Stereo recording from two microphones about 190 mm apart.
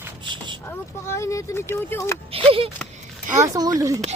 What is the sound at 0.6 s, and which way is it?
Speech, 15° left (ahead or behind).